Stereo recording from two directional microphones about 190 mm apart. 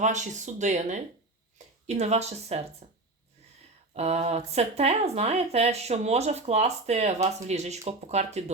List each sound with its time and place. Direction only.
0.0 s speech: 40° right (ahead or behind)